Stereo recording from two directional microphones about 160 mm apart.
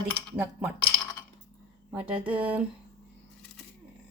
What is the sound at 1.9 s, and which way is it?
Speech, 5° right (ahead or behind).